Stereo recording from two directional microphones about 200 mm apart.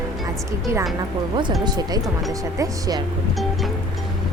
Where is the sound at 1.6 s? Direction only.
20° right (ahead or behind).